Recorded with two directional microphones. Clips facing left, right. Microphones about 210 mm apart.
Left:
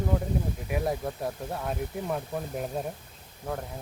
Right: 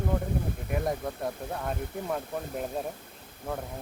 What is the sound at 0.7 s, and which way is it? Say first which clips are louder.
Speech: left 1 dB; 5° left (ahead or behind).